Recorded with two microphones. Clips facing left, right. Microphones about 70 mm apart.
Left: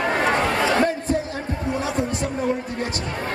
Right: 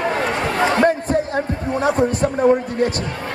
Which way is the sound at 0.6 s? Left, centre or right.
Right.